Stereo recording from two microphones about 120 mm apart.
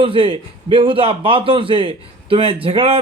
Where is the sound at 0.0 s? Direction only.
50° right (ahead or behind).